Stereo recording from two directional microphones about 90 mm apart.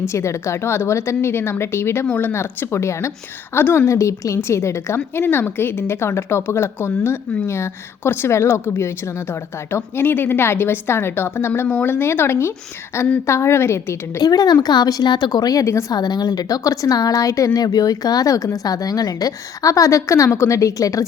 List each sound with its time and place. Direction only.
0.1 s a woman's voice: 30° left (ahead or behind)
14.2 s speech: 45° left (ahead or behind)
15.9 s a woman's voice: 50° left (ahead or behind)